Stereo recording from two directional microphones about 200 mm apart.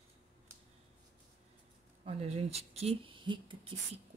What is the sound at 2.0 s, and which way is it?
Speech, 30° right (ahead or behind).